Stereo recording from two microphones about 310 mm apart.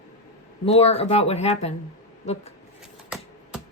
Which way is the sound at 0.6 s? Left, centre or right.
Centre.